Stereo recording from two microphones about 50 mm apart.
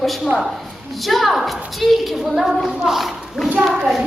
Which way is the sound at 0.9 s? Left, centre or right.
Centre.